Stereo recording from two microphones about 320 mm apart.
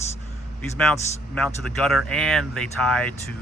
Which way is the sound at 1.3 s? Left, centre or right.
Centre.